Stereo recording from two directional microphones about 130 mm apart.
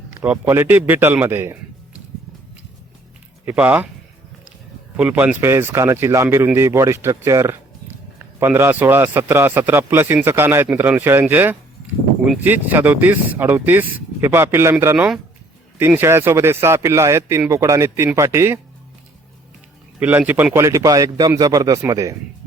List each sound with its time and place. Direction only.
0.4 s a man's voice: 20° right (ahead or behind)
3.4 s speech: 10° right (ahead or behind)
4.9 s a man's voice: 10° right (ahead or behind)
12.6 s speech: 15° right (ahead or behind)
14.9 s speech: 5° right (ahead or behind)
16.0 s a man's voice: 20° right (ahead or behind)
20.0 s a man's voice: 15° right (ahead or behind)